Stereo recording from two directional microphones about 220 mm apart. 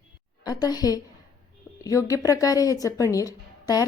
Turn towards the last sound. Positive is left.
turn(degrees=15)  # may be behind; listen again after turning